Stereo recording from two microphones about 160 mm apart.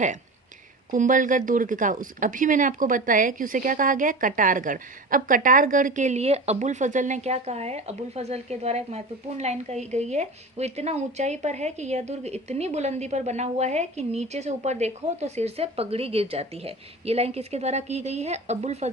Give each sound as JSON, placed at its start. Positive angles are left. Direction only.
{"t": 0.9, "sound": "a woman's voice", "side_deg": -55}